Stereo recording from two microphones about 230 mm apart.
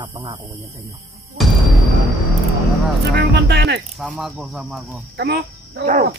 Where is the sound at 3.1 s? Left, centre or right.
Right.